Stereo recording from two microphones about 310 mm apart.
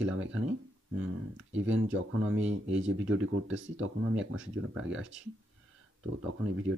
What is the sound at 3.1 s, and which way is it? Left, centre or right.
Speech, right.